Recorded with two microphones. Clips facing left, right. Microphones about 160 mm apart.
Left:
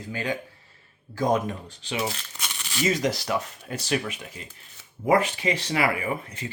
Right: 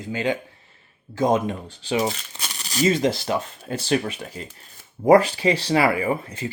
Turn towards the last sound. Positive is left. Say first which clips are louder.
# right 6 dB
turn(degrees=-30)  # may be behind; listen again after turning